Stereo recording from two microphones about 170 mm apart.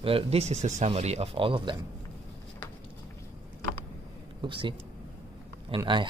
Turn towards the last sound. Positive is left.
turn(degrees=-30)  # may be behind; listen again after turning